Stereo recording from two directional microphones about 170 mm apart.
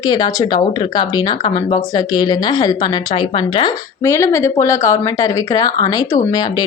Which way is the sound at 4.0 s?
15° left (ahead or behind).